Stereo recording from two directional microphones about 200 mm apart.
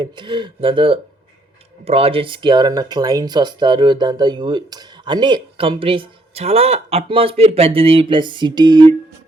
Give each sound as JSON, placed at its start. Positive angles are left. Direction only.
{"t": 0.0, "sound": "speech", "side_deg": -25}